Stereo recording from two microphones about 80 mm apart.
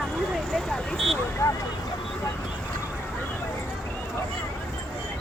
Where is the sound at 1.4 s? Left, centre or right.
Left.